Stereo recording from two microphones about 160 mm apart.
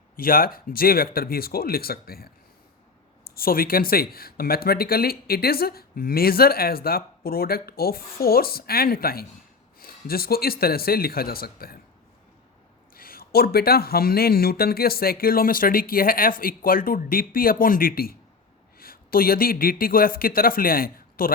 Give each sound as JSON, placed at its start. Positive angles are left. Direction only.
{"t": 0.2, "sound": "speech", "side_deg": 65}
{"t": 12.9, "sound": "speech", "side_deg": 65}